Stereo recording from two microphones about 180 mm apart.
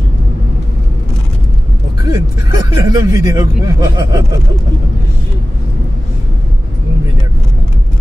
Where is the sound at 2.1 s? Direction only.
20° right (ahead or behind).